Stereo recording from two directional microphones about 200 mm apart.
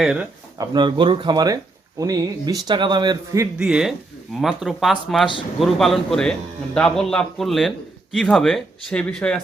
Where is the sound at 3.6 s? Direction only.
5° right (ahead or behind).